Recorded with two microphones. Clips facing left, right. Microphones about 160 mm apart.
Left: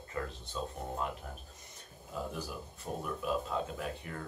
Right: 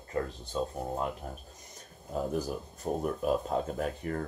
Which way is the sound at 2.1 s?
45° right (ahead or behind).